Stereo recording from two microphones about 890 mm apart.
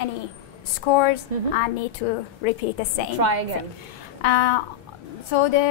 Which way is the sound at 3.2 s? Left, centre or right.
Right.